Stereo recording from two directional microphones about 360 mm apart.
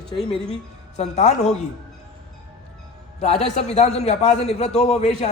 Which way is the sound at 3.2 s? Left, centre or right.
Centre.